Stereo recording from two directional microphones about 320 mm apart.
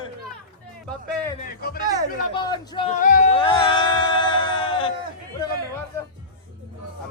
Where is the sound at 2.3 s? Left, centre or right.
Centre.